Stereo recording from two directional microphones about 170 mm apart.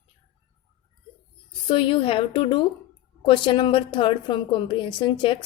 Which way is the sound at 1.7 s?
30° left (ahead or behind).